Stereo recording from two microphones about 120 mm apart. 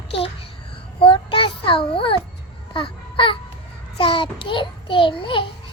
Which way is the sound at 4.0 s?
45° left (ahead or behind).